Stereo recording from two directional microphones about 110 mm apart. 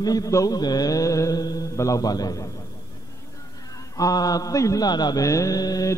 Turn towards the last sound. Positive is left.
turn(degrees=35)  # may be behind; listen again after turning